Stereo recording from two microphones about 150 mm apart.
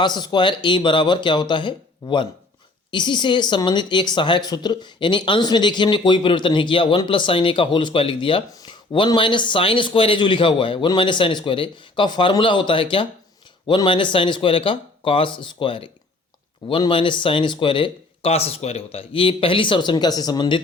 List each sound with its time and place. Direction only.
0.0 s speech: 30° left (ahead or behind)